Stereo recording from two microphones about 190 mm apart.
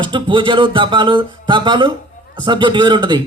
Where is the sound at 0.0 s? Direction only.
25° right (ahead or behind).